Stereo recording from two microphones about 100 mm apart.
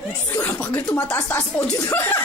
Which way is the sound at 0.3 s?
25° left (ahead or behind).